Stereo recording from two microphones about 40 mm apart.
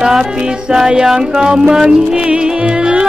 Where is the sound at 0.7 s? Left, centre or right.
Centre.